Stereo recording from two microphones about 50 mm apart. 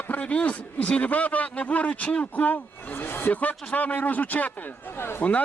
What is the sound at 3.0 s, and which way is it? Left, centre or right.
Speech, left.